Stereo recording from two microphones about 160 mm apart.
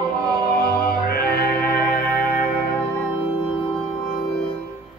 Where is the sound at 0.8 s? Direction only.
70° left (ahead or behind).